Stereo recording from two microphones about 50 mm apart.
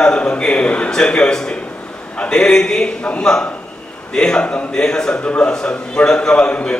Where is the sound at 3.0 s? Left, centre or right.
Left.